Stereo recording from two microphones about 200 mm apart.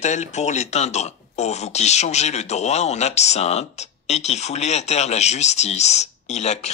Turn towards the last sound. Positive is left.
turn(degrees=35)  # may be behind; listen again after turning